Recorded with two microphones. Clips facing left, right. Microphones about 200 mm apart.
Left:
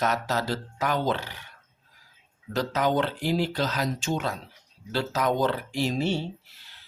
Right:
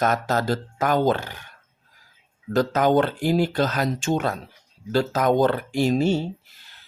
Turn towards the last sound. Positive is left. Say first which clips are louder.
# right 6 dB
turn(degrees=-45)  # may be behind; listen again after turning